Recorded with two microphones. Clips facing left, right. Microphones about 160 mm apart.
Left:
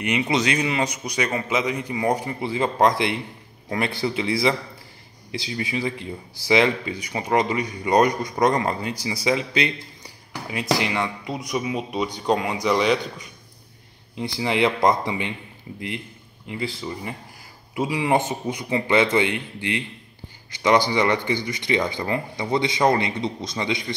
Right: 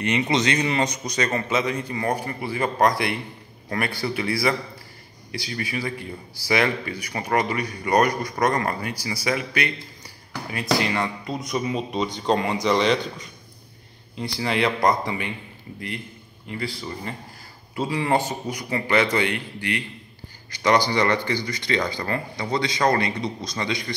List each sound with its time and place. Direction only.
0.0 s speech: 10° left (ahead or behind)
14.1 s speech: 20° left (ahead or behind)
16.4 s speech: 20° left (ahead or behind)
20.9 s speech: 20° left (ahead or behind)